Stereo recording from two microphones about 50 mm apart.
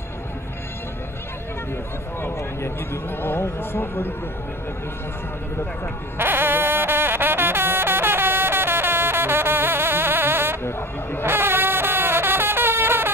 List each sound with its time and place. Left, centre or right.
2.2 s a man's voice: left
6.1 s music: right
11.2 s a sound: right